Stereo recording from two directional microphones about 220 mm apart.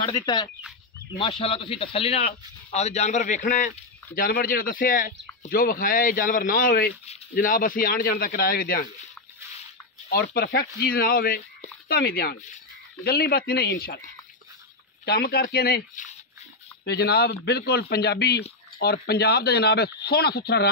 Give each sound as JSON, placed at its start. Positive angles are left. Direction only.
{"t": 0.0, "sound": "speech", "side_deg": 20}
{"t": 10.0, "sound": "speech", "side_deg": 45}
{"t": 15.0, "sound": "speech", "side_deg": 45}